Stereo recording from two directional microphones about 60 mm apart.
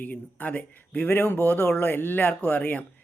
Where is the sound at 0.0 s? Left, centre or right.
Left.